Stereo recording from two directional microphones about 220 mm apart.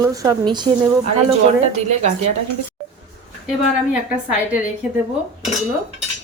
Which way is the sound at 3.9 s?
5° right (ahead or behind).